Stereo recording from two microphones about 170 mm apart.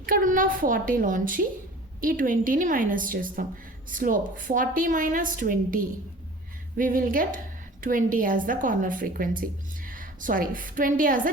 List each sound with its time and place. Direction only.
0.0 s a woman's voice: 55° right (ahead or behind)